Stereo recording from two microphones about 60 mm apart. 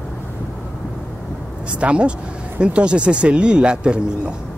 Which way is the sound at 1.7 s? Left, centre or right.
Centre.